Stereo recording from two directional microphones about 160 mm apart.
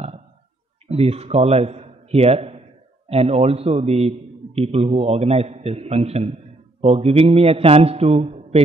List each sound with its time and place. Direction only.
0.8 s a man's voice: 40° right (ahead or behind)